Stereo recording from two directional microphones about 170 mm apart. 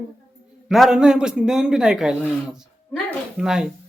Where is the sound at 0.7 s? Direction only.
Centre (ahead or behind).